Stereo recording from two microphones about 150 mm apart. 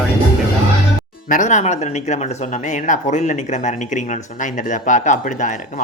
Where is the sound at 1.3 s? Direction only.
55° left (ahead or behind).